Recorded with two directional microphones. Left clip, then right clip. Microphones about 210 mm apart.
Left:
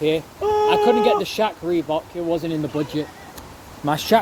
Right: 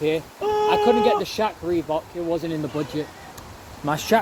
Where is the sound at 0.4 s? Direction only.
15° right (ahead or behind).